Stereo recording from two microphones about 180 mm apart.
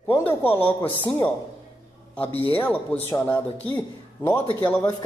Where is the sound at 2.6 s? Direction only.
10° left (ahead or behind).